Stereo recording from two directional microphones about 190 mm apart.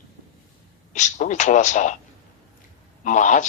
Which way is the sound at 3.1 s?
40° left (ahead or behind).